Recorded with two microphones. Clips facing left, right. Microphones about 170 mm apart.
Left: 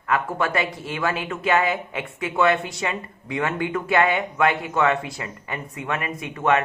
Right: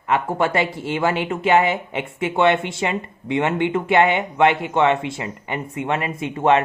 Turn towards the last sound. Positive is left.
turn(degrees=-30)  # may be behind; listen again after turning